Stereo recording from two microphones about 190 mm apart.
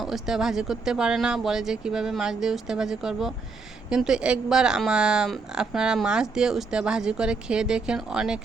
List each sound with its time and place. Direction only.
0.0 s a woman's voice: centre (ahead or behind)